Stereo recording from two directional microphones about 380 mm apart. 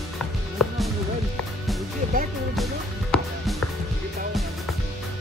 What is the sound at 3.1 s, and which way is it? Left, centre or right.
Music, centre.